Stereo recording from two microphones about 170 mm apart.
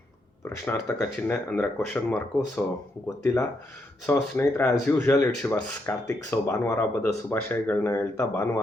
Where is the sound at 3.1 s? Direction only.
15° left (ahead or behind).